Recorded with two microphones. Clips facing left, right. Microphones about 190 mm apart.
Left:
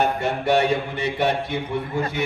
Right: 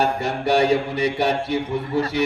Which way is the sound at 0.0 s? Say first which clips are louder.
Even; 35° right (ahead or behind).